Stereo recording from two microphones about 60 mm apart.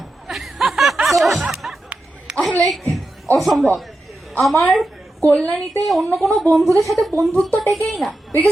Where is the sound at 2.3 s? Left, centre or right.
Centre.